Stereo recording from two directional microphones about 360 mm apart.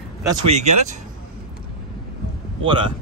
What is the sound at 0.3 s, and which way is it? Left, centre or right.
Speech, centre.